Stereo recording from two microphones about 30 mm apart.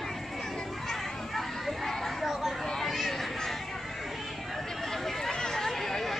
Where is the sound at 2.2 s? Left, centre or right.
Centre.